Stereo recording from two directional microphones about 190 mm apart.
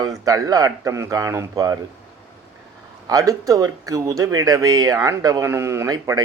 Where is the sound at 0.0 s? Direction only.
20° right (ahead or behind).